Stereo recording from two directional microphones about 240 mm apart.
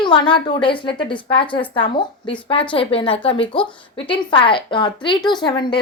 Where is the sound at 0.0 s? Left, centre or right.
Centre.